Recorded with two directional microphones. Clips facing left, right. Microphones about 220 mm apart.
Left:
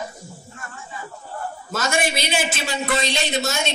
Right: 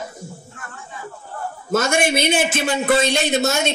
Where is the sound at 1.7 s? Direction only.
50° right (ahead or behind).